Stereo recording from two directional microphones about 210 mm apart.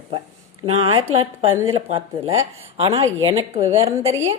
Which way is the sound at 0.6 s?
30° right (ahead or behind).